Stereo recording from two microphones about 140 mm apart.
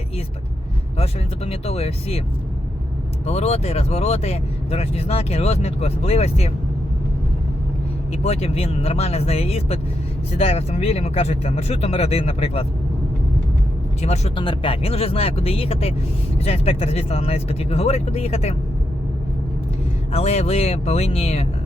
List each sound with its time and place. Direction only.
0.9 s speech: 45° left (ahead or behind)
3.2 s speech: 50° left (ahead or behind)
8.1 s speech: 50° left (ahead or behind)
14.0 s speech: 50° left (ahead or behind)
14.3 s speech: 40° left (ahead or behind)
20.1 s speech: 50° left (ahead or behind)